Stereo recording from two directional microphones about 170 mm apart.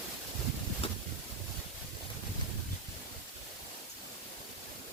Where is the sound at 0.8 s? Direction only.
35° left (ahead or behind).